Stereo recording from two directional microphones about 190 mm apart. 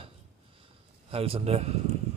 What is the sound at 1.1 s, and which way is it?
Speech, 30° right (ahead or behind).